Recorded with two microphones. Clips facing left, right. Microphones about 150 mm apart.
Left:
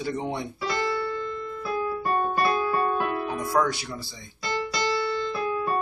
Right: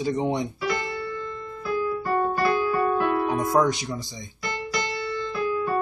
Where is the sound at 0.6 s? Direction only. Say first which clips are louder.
Right 1 dB; 25° left (ahead or behind).